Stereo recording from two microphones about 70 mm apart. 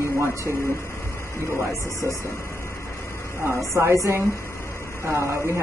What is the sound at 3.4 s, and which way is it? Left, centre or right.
Speech, right.